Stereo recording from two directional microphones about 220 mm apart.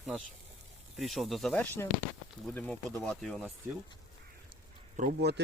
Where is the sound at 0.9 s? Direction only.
Centre (ahead or behind).